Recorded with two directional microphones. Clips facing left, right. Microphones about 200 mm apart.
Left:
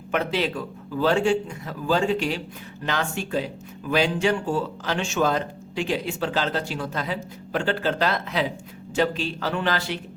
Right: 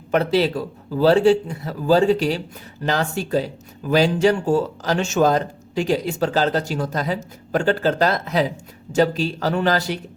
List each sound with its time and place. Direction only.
0.1 s speech: 35° right (ahead or behind)